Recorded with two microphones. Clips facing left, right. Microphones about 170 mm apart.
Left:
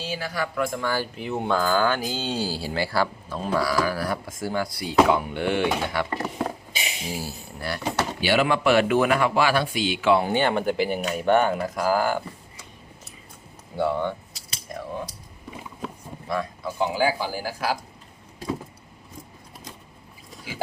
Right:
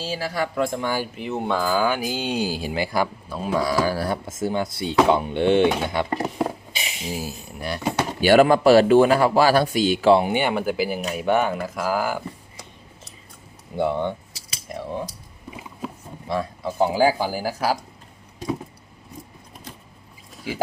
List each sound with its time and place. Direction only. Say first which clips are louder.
0.0 s speech: right 3 dB; 30° right (ahead or behind)
1.1 s speech: even; centre (ahead or behind)
3.6 s speech: right 3 dB; 25° right (ahead or behind)
8.2 s speech: right 8 dB; 45° right (ahead or behind)
10.2 s speech: right 1 dB; 15° right (ahead or behind)
13.7 s speech: right 2 dB; 20° right (ahead or behind)
16.3 s speech: right 2 dB; 30° right (ahead or behind)